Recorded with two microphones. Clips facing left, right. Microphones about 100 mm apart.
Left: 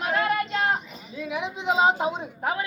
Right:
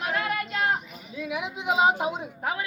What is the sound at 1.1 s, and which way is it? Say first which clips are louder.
A woman's voice: left 1 dB; 15° right (ahead or behind).